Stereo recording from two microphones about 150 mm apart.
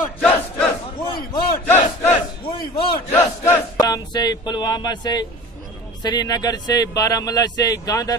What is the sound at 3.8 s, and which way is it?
A man's voice, 25° left (ahead or behind).